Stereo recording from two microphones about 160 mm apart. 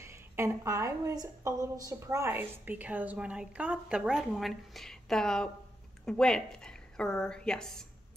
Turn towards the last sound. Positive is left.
turn(degrees=5)  # may be behind; listen again after turning